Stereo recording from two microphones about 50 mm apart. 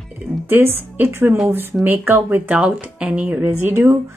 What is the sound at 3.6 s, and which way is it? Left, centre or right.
Speech, right.